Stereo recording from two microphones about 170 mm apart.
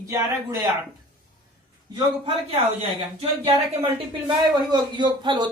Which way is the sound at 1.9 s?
30° right (ahead or behind).